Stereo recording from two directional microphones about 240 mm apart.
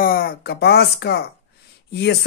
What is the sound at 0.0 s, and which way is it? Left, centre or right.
Speech, left.